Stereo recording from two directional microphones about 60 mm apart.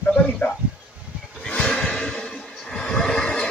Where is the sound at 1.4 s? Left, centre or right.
Centre.